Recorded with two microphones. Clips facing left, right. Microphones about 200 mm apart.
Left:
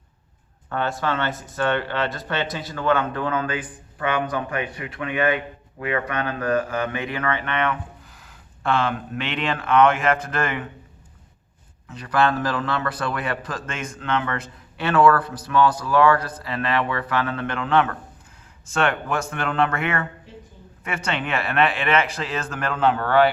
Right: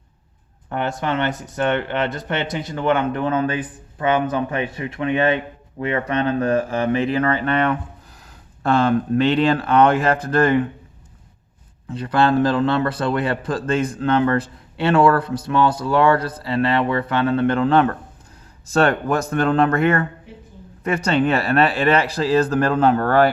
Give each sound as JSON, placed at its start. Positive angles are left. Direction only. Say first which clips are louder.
{"t": 0.7, "sound": "a man's voice", "louder": "right 2 dB", "side_deg": -20}
{"t": 11.9, "sound": "a man's voice", "louder": "right 3 dB", "side_deg": -30}